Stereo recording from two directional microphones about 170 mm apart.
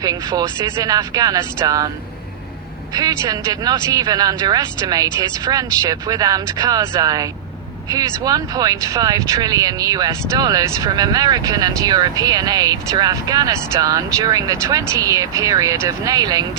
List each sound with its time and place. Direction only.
0.0 s speech: 20° right (ahead or behind)
2.9 s speech: 20° right (ahead or behind)